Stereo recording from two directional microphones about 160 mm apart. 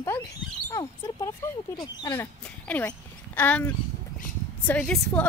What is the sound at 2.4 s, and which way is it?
Speech, 10° left (ahead or behind).